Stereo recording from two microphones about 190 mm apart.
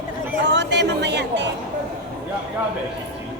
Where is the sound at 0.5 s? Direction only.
65° right (ahead or behind).